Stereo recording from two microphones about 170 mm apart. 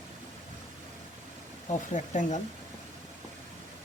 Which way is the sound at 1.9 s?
45° left (ahead or behind).